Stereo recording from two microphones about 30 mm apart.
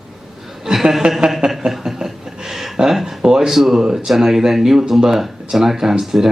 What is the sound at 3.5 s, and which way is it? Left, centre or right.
Speech, centre.